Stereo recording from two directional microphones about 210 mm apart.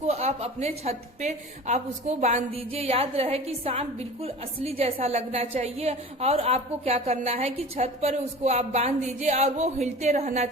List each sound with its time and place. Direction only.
0.0 s a woman's voice: 30° right (ahead or behind)